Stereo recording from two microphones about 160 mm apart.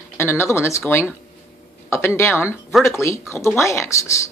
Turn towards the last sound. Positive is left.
turn(degrees=20)  # may be behind; listen again after turning